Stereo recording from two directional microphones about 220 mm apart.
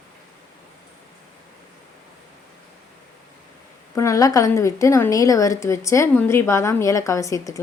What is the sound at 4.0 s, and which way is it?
A woman's voice, 15° left (ahead or behind).